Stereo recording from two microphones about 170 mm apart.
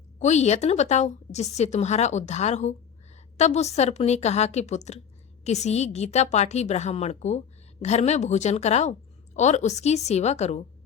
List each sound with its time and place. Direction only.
0.2 s a woman's voice: 40° left (ahead or behind)